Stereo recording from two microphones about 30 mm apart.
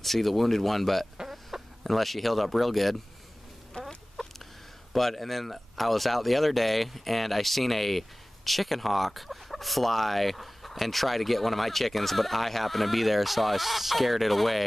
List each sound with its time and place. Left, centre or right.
0.0 s speech: centre
3.8 s chicken: left
4.9 s speech: centre